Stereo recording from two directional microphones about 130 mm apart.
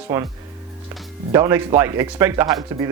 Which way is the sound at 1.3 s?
20° right (ahead or behind).